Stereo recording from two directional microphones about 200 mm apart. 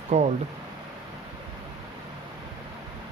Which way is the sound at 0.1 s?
35° right (ahead or behind).